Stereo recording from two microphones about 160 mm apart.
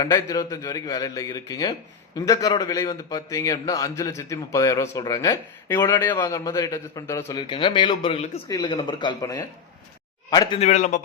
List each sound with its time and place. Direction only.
0.0 s a man's voice: 20° left (ahead or behind)
7.4 s a man's voice: 30° left (ahead or behind)
10.5 s a man's voice: 45° left (ahead or behind)